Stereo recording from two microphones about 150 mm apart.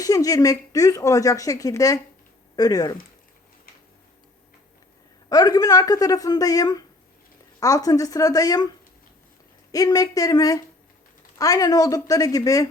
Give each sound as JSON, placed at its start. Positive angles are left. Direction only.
{"t": 0.0, "sound": "speech", "side_deg": 25}
{"t": 5.3, "sound": "speech", "side_deg": 25}
{"t": 9.7, "sound": "speech", "side_deg": 25}